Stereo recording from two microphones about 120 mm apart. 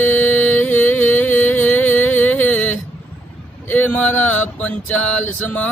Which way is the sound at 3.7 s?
10° left (ahead or behind).